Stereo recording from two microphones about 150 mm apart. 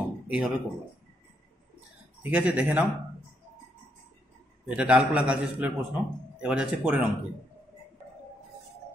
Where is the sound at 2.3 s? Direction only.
10° right (ahead or behind).